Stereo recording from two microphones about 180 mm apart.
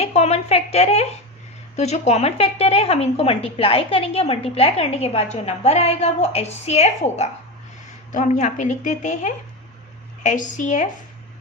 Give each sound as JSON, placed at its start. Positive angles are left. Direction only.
{"t": 0.0, "sound": "a woman's voice", "side_deg": 35}